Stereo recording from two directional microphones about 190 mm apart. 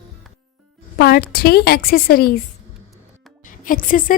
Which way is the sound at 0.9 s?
55° left (ahead or behind).